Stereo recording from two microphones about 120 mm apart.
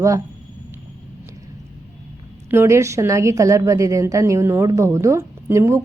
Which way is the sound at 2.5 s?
20° right (ahead or behind).